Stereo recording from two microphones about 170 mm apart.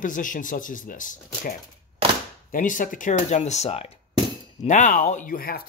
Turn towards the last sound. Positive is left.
turn(degrees=60)  # may be behind; listen again after turning